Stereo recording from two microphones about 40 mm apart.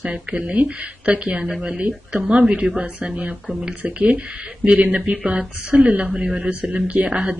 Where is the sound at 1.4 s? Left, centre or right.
Centre.